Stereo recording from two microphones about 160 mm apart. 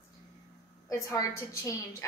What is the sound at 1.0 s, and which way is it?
Speech, 20° left (ahead or behind).